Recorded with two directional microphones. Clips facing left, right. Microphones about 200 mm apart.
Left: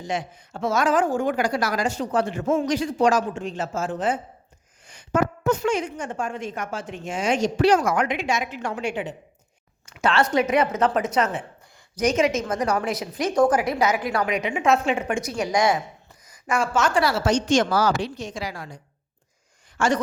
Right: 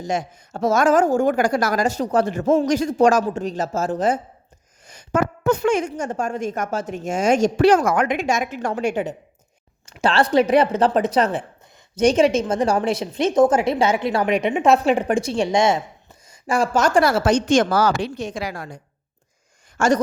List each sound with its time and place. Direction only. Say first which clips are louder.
0.0 s a woman's voice: right 4 dB; 45° right (ahead or behind)
4.9 s a sound: right 2 dB; 40° right (ahead or behind)
5.4 s a woman's voice: right 4 dB; 60° right (ahead or behind)
9.8 s a woman's voice: right 3 dB; 30° right (ahead or behind)